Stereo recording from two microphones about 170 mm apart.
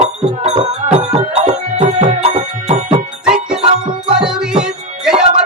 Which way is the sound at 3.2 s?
5° right (ahead or behind).